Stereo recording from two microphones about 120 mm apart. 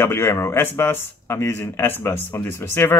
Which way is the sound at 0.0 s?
20° left (ahead or behind).